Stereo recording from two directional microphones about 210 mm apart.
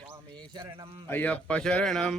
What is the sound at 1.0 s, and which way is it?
Mantra, 10° left (ahead or behind).